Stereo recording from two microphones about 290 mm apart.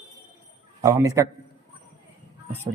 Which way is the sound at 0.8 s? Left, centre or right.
Centre.